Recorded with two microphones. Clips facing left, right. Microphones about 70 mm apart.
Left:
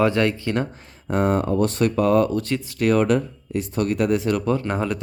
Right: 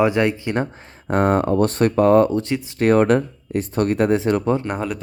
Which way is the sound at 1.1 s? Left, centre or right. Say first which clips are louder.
Right 3 dB; right.